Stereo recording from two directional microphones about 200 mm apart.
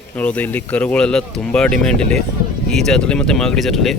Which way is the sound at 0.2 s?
10° left (ahead or behind).